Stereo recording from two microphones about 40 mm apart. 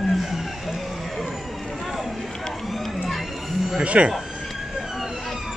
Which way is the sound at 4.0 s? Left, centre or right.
Right.